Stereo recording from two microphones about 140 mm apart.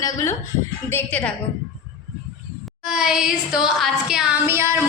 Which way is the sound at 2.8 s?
5° right (ahead or behind).